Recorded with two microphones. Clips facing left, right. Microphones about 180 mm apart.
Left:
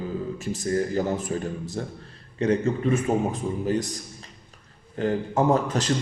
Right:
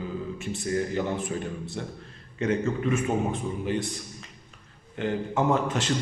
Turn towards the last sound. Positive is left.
turn(degrees=40)  # may be behind; listen again after turning